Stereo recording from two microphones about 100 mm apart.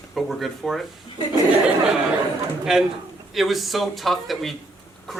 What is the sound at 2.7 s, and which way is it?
Speech, 5° right (ahead or behind).